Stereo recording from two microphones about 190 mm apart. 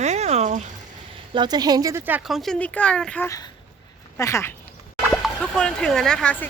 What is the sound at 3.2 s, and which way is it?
Speech, 15° left (ahead or behind).